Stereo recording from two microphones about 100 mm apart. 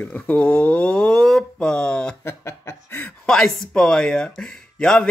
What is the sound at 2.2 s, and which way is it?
Speech, 25° left (ahead or behind).